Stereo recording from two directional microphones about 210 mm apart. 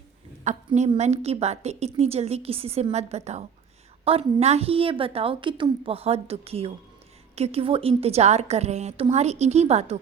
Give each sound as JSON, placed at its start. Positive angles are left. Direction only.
{"t": 0.4, "sound": "a woman's voice", "side_deg": -35}